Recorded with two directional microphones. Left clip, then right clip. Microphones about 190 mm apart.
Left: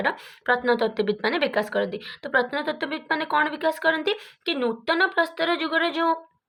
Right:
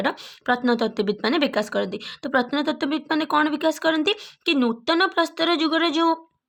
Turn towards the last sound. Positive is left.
turn(degrees=-40)  # may be behind; listen again after turning